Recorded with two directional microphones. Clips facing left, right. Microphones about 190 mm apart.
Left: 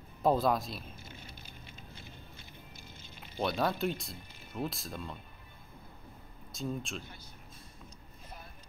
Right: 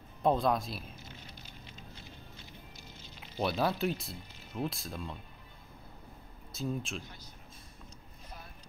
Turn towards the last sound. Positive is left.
turn(degrees=0)  # may be behind; listen again after turning